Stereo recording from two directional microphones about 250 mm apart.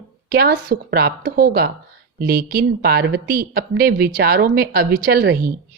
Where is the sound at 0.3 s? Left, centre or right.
Right.